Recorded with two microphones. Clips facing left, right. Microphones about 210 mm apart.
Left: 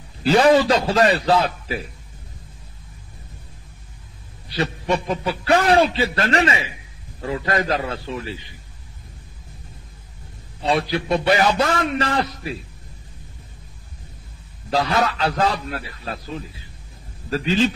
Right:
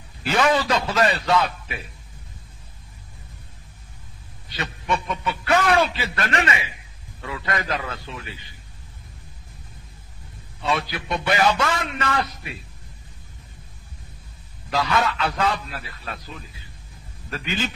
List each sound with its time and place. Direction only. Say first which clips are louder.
0.2 s a man's voice: left 6 dB; 30° left (ahead or behind)
4.6 s a man's voice: left 5 dB; 30° left (ahead or behind)
10.6 s a man's voice: left 5 dB; 30° left (ahead or behind)
14.7 s a man's voice: left 2 dB; 35° left (ahead or behind)
17.3 s a man's voice: left 9 dB; 30° left (ahead or behind)